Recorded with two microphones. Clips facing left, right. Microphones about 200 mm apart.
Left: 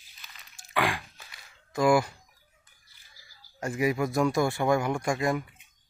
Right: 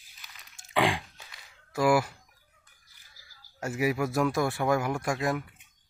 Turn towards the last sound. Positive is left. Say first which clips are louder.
# left 2 dB
turn(degrees=0)  # may be behind; listen again after turning